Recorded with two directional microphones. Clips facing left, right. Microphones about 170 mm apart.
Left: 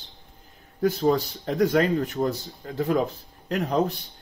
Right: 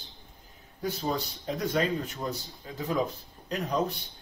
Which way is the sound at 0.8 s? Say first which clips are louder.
Left 9 dB; 65° left (ahead or behind).